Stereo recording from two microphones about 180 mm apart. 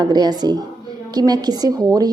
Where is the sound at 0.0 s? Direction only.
20° right (ahead or behind).